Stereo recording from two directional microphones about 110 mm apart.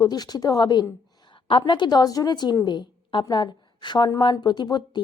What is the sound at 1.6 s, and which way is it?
A woman's voice, 40° left (ahead or behind).